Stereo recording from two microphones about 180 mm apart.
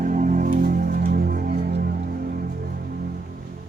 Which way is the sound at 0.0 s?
45° right (ahead or behind).